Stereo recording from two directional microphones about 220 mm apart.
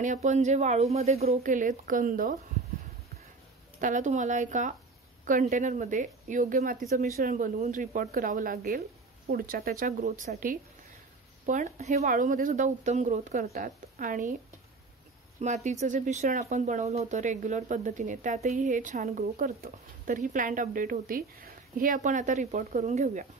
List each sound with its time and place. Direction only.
0.0 s speech: 35° right (ahead or behind)
3.8 s speech: 35° right (ahead or behind)
15.4 s speech: 30° right (ahead or behind)